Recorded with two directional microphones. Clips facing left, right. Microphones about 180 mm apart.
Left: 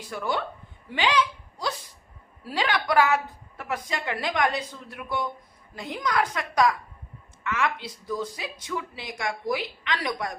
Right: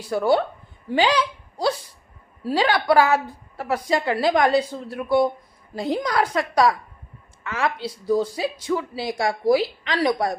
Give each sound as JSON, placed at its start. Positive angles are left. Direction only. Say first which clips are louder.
{"t": 0.1, "sound": "speech", "louder": "right 10 dB", "side_deg": -35}